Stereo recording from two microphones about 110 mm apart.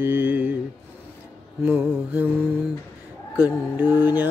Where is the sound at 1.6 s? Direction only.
15° right (ahead or behind).